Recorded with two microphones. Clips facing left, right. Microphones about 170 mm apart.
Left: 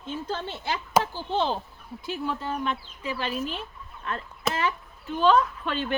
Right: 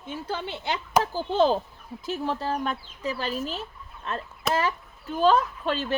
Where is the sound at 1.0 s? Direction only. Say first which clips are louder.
Right 5 dB; 40° right (ahead or behind).